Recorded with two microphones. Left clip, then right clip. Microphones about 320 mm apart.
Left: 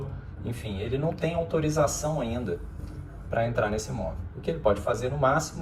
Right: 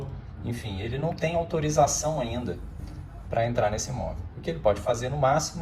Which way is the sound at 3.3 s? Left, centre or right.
Centre.